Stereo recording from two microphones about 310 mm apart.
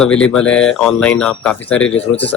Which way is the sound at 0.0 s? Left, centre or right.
Centre.